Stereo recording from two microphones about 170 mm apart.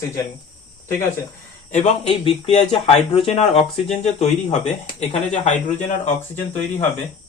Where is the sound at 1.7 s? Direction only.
40° left (ahead or behind).